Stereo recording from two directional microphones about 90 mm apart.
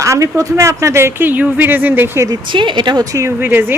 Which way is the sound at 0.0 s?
35° right (ahead or behind).